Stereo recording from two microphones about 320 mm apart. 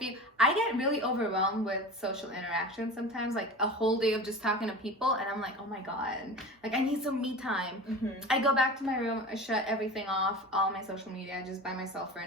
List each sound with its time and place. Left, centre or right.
0.0 s a woman's voice: centre
6.7 s a woman's voice: centre